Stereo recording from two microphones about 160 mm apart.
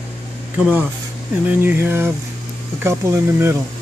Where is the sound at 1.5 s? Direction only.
10° right (ahead or behind).